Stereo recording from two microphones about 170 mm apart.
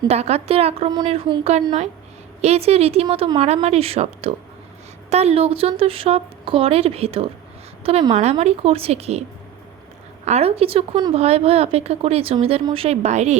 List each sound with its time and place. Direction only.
0.1 s speech: 40° right (ahead or behind)
10.2 s speech: 40° right (ahead or behind)